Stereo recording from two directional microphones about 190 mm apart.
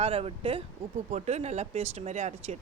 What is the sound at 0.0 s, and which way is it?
Speech, 30° right (ahead or behind).